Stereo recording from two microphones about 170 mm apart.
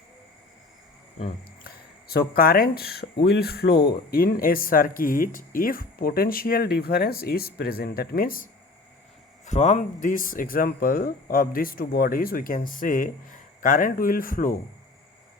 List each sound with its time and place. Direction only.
1.6 s speech: 65° left (ahead or behind)
9.5 s speech: 45° left (ahead or behind)